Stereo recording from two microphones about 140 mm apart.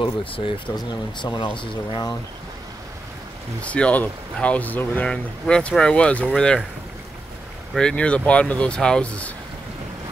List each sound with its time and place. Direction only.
0.0 s speech: 35° left (ahead or behind)
3.7 s speech: 10° left (ahead or behind)
7.7 s speech: 5° left (ahead or behind)